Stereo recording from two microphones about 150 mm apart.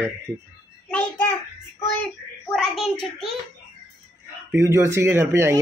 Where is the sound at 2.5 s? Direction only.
Centre (ahead or behind).